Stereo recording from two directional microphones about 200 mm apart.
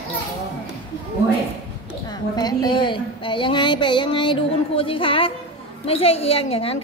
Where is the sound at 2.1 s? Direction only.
20° left (ahead or behind).